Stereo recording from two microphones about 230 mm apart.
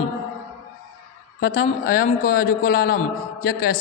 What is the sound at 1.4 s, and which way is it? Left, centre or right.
A man's voice, left.